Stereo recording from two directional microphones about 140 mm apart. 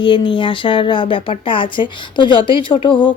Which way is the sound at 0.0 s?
35° left (ahead or behind).